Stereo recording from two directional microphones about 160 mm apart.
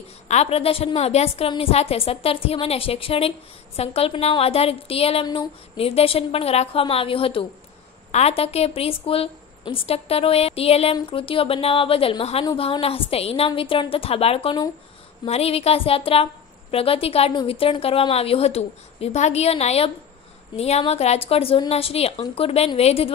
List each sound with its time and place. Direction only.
0.3 s a woman's voice: 40° left (ahead or behind)